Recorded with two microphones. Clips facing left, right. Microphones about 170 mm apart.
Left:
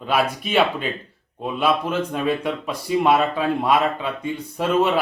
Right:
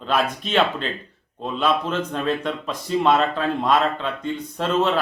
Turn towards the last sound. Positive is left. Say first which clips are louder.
# left 2 dB
turn(degrees=10)  # may be behind; listen again after turning